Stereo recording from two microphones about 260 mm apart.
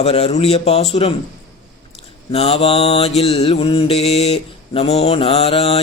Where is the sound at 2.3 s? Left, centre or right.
Left.